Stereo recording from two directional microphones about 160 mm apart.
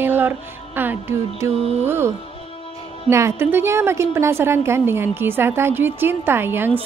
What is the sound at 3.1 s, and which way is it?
Music, 15° right (ahead or behind).